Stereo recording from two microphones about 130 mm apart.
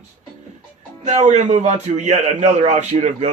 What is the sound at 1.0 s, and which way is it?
Speech, 65° right (ahead or behind).